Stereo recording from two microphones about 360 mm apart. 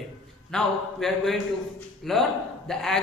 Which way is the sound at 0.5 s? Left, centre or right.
Centre.